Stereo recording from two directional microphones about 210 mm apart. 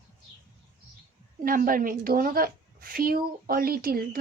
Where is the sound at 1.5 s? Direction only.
40° right (ahead or behind).